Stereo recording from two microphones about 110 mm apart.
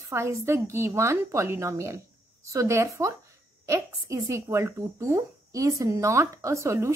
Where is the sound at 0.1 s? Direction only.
25° right (ahead or behind).